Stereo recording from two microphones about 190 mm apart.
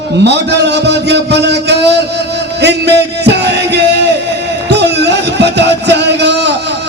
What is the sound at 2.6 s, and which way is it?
Music, 60° right (ahead or behind).